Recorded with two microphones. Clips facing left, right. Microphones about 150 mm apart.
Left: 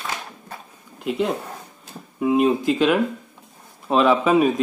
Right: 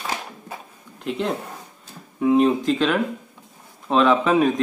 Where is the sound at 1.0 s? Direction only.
5° left (ahead or behind).